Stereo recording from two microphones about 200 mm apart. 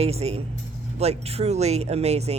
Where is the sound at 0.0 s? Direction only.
30° right (ahead or behind).